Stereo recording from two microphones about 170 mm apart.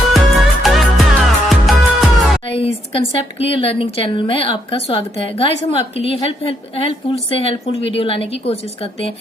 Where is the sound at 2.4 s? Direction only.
35° left (ahead or behind).